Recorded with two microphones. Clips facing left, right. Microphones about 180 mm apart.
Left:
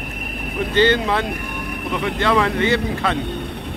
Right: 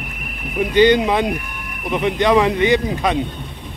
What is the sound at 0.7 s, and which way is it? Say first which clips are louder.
A man's voice: right 4 dB; 15° right (ahead or behind).